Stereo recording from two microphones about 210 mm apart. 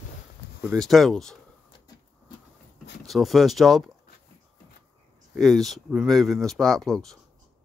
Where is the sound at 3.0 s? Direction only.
Centre (ahead or behind).